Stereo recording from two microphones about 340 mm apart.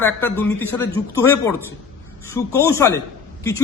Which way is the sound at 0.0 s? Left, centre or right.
Centre.